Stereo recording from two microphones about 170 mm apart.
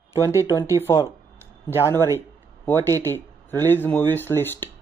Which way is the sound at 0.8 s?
15° left (ahead or behind).